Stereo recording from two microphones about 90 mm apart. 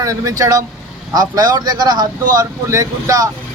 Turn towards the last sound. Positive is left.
turn(degrees=-40)  # may be behind; listen again after turning